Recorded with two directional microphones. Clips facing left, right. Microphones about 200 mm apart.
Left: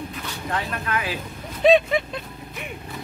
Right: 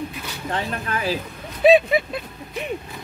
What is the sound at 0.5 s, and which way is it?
Speech, 30° right (ahead or behind).